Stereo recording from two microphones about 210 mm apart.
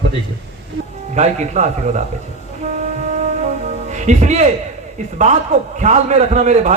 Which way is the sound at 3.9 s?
35° right (ahead or behind).